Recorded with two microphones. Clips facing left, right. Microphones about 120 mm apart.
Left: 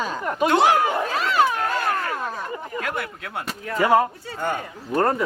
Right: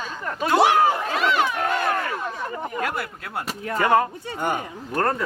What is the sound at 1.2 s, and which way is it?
Run, 40° left (ahead or behind).